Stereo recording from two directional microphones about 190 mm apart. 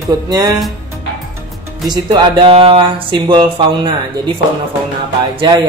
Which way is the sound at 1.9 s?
25° right (ahead or behind).